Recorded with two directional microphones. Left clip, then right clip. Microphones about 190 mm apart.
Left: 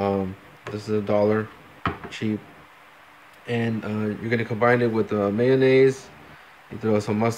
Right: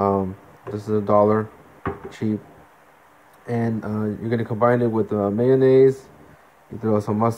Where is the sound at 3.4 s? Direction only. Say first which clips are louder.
Right 1 dB; 10° left (ahead or behind).